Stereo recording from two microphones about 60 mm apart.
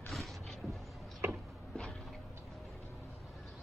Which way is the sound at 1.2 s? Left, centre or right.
Right.